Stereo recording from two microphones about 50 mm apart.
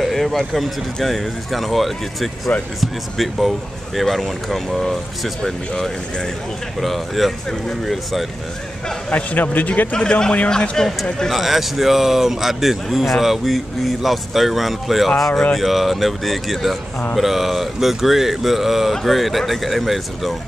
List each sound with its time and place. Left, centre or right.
0.0 s speech: centre
6.8 s speech: centre
9.1 s a man's voice: left
9.9 s a man's voice: centre
11.2 s speech: centre